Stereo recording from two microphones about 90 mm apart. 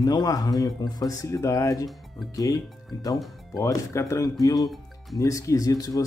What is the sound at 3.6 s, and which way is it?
Speech, 35° left (ahead or behind).